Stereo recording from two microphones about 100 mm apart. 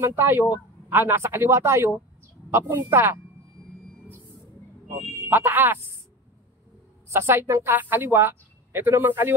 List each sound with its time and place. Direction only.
0.0 s a woman's voice: 25° right (ahead or behind)
5.3 s a woman's voice: 20° right (ahead or behind)
7.1 s a woman's voice: 25° right (ahead or behind)